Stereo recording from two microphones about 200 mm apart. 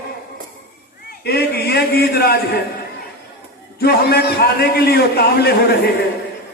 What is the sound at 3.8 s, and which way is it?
A man's voice, 50° left (ahead or behind).